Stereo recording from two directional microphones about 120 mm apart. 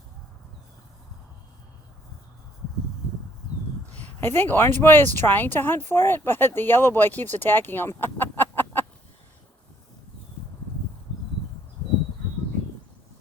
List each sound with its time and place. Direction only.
4.0 s speech: 15° left (ahead or behind)